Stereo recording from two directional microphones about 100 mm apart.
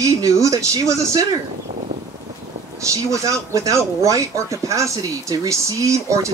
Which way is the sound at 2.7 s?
30° right (ahead or behind).